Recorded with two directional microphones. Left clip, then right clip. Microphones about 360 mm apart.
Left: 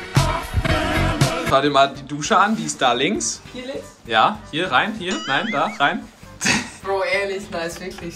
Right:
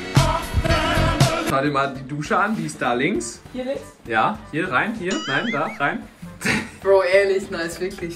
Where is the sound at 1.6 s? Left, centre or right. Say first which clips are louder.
Left 5 dB; centre.